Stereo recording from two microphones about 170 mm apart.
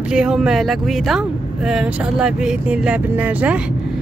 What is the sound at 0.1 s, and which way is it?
Speech, 5° right (ahead or behind).